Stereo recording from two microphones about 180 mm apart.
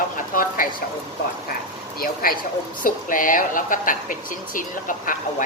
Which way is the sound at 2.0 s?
55° left (ahead or behind).